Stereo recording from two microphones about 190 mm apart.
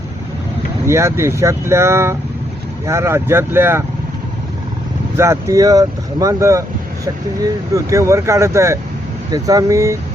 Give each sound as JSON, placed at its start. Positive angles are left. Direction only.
{"t": 0.9, "sound": "speech", "side_deg": -15}
{"t": 5.1, "sound": "speech", "side_deg": -15}